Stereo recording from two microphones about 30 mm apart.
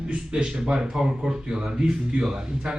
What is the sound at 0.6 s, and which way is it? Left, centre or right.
Speech, right.